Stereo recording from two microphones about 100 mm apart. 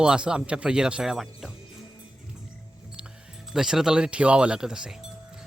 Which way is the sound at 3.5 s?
5° right (ahead or behind).